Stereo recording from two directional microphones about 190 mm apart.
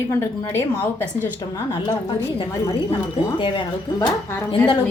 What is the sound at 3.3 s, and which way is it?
Speech, 25° left (ahead or behind).